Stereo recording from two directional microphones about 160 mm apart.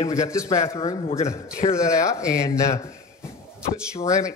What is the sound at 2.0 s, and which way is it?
Speech, 20° left (ahead or behind).